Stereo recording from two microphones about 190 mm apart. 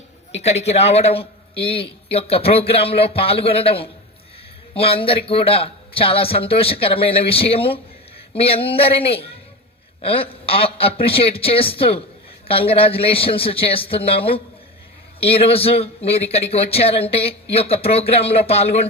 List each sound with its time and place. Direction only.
0.3 s a man's voice: 35° left (ahead or behind)